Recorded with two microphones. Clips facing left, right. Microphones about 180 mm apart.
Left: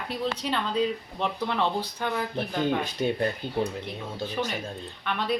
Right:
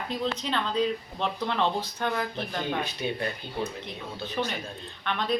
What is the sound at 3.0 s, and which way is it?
Speech, 45° left (ahead or behind).